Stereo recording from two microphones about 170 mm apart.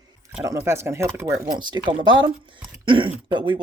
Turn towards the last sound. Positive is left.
turn(degrees=-30)  # may be behind; listen again after turning